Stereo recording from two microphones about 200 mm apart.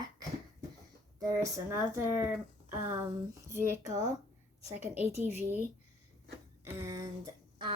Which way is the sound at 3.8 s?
35° right (ahead or behind).